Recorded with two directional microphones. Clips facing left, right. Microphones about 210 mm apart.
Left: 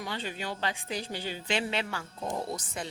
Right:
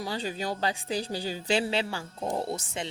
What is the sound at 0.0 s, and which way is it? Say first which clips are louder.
A woman's voice: right 4 dB; 35° right (ahead or behind).